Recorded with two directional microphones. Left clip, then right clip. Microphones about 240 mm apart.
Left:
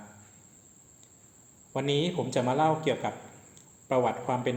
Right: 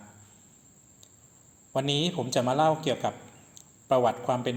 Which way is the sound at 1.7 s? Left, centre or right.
Right.